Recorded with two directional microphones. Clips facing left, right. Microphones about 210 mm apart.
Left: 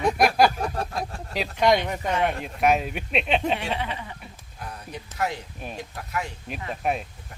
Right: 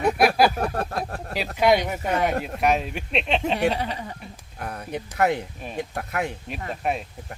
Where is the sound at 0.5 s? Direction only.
60° right (ahead or behind).